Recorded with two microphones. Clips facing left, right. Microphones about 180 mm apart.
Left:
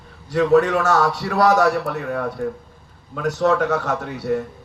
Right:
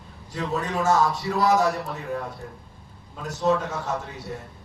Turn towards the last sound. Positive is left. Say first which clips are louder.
# left 8 dB
turn(degrees=70)  # may be behind; listen again after turning